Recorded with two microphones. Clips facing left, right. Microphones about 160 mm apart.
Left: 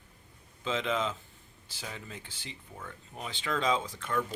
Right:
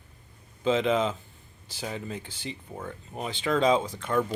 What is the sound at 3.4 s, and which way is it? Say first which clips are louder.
Speech: right 7 dB; 25° right (ahead or behind).